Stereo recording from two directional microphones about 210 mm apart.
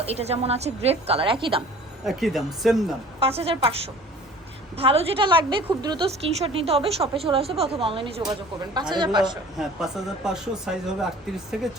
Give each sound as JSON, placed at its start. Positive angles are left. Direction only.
{"t": 0.0, "sound": "a woman's voice", "side_deg": -30}
{"t": 2.0, "sound": "speech", "side_deg": 0}
{"t": 3.2, "sound": "a woman's voice", "side_deg": -25}
{"t": 4.8, "sound": "a woman's voice", "side_deg": -25}
{"t": 9.6, "sound": "speech", "side_deg": 0}